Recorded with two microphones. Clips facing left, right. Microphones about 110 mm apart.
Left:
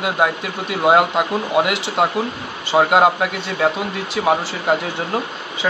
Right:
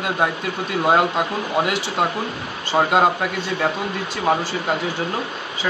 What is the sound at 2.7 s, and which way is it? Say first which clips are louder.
Speech: left 3 dB; 10° left (ahead or behind).